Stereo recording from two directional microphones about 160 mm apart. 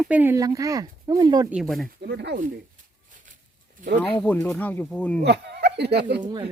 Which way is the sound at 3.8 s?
55° right (ahead or behind).